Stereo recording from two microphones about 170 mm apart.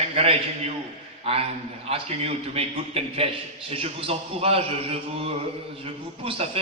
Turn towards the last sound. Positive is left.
turn(degrees=-35)  # may be behind; listen again after turning